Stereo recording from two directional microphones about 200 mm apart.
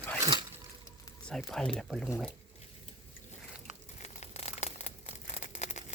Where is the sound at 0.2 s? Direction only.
20° right (ahead or behind).